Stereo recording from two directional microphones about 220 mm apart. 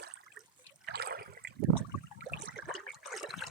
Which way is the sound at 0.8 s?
45° right (ahead or behind).